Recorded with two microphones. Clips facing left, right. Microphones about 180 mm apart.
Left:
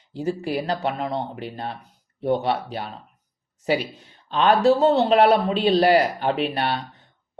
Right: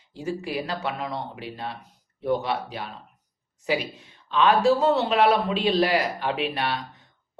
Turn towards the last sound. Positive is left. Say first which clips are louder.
# left 3 dB
turn(degrees=35)  # may be behind; listen again after turning